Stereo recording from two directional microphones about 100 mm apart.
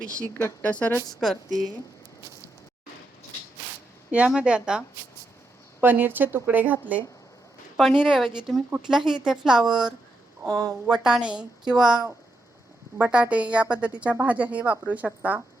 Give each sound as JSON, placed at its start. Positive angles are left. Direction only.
{"t": 0.0, "sound": "speech", "side_deg": 10}
{"t": 1.2, "sound": "a woman's voice", "side_deg": 0}
{"t": 4.1, "sound": "a woman's voice", "side_deg": -10}
{"t": 5.8, "sound": "a woman's voice", "side_deg": -20}
{"t": 7.8, "sound": "a woman's voice", "side_deg": -5}